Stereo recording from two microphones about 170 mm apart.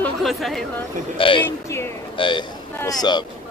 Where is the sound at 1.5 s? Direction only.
15° left (ahead or behind).